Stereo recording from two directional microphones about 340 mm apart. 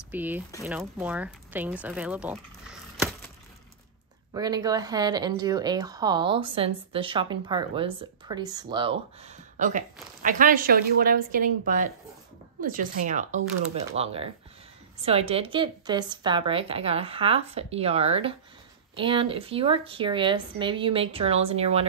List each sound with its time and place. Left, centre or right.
0.1 s speech: centre
4.3 s a woman's voice: centre